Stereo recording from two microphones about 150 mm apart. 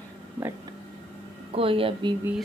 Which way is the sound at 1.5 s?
40° right (ahead or behind).